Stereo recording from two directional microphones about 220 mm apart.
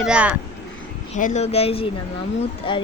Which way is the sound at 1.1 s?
30° left (ahead or behind).